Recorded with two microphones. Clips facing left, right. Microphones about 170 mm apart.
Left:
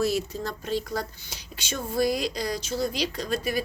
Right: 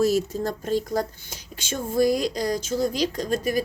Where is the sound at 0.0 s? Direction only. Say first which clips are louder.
Right 5 dB; 45° right (ahead or behind).